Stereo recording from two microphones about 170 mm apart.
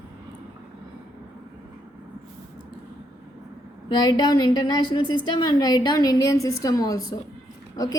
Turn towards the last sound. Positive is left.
turn(degrees=20)  # may be behind; listen again after turning